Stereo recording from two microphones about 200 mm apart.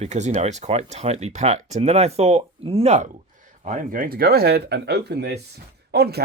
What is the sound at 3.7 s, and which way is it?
Speech, 45° right (ahead or behind).